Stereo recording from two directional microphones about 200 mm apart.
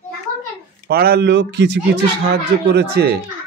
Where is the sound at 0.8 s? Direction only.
50° right (ahead or behind).